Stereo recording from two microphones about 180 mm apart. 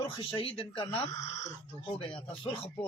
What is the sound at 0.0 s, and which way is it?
Speech, 25° left (ahead or behind).